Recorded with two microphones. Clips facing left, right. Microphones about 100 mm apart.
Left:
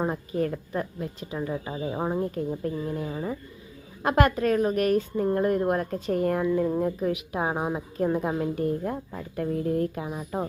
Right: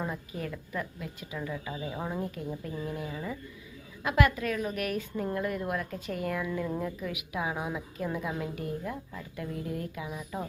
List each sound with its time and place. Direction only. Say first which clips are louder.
0.0 s a woman's voice: left 9 dB; 45° left (ahead or behind)